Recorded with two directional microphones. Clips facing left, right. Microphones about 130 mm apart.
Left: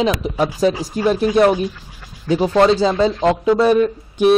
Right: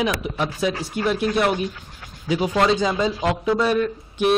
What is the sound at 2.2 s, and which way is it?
Speech, 35° left (ahead or behind).